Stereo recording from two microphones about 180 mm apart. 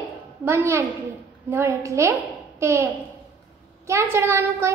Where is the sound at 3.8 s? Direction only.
15° right (ahead or behind).